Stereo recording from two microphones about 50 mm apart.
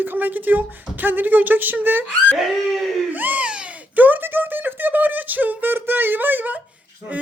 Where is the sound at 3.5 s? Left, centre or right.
Right.